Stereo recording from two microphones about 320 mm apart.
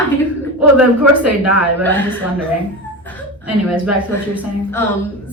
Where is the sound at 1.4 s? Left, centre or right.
Centre.